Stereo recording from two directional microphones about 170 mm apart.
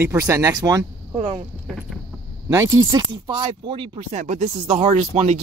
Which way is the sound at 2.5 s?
15° right (ahead or behind).